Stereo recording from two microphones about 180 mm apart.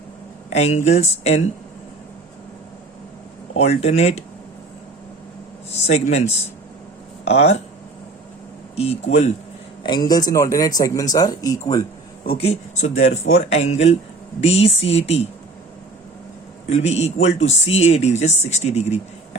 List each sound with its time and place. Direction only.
0.5 s speech: 35° left (ahead or behind)
3.6 s speech: 35° left (ahead or behind)
5.7 s speech: 35° left (ahead or behind)
8.7 s speech: 35° left (ahead or behind)
9.8 s speech: 25° left (ahead or behind)
12.4 s speech: 35° left (ahead or behind)
16.6 s speech: 35° left (ahead or behind)